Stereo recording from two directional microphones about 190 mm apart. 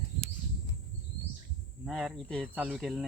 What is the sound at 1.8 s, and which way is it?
Speech, centre (ahead or behind).